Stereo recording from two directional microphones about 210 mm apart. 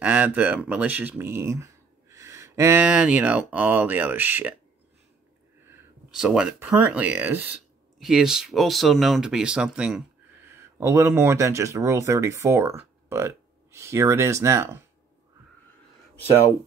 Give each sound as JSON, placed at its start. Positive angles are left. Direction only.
{"t": 0.0, "sound": "speech", "side_deg": -5}
{"t": 5.7, "sound": "speech", "side_deg": -5}